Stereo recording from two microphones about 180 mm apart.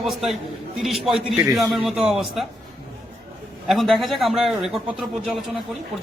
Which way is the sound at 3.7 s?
Centre (ahead or behind).